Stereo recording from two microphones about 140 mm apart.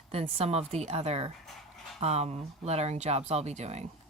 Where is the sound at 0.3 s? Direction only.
50° right (ahead or behind).